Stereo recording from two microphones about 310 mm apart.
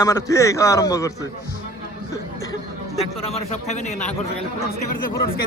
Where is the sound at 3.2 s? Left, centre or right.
Centre.